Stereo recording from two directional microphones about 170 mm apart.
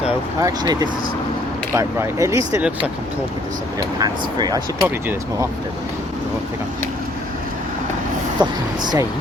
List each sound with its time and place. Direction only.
0.3 s speech: 20° right (ahead or behind)
4.0 s speech: 25° right (ahead or behind)
8.4 s speech: 25° right (ahead or behind)